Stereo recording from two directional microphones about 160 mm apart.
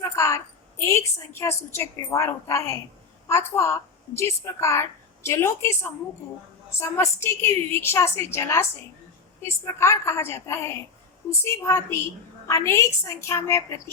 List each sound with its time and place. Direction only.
0.0 s a woman's voice: 20° left (ahead or behind)